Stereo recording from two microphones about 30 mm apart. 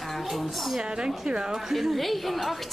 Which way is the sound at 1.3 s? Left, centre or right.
Right.